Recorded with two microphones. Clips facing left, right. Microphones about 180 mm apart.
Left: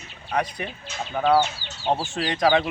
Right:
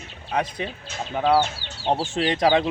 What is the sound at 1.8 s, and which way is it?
Speech, 25° right (ahead or behind).